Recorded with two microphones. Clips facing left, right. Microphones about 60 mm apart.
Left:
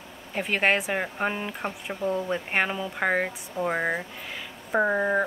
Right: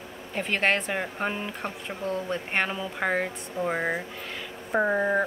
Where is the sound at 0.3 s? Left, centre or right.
Centre.